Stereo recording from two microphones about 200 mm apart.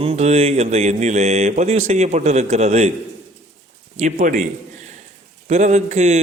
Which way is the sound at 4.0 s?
35° right (ahead or behind).